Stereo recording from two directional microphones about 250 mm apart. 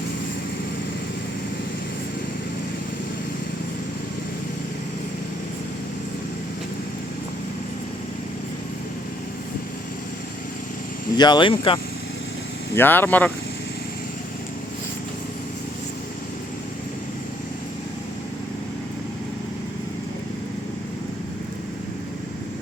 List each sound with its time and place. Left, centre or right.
11.2 s speech: centre
12.7 s speech: centre